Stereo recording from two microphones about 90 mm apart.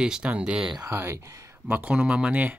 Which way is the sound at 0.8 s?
30° right (ahead or behind).